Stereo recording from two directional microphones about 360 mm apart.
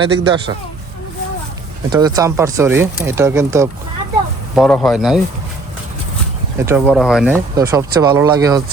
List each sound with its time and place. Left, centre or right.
0.0 s speech: centre
1.9 s speech: centre
6.7 s speech: centre